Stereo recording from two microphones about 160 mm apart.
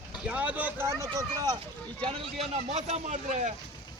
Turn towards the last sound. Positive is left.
turn(degrees=-45)  # may be behind; listen again after turning